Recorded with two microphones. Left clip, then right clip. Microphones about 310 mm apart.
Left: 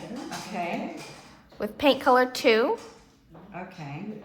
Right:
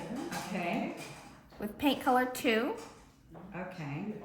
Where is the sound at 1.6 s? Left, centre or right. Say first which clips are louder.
Left 9 dB; centre.